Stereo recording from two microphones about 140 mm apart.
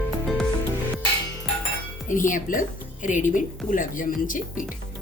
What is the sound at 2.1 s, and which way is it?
A woman's voice, 70° left (ahead or behind).